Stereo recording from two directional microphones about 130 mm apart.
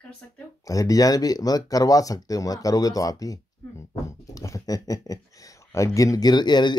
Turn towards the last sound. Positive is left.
turn(degrees=35)  # may be behind; listen again after turning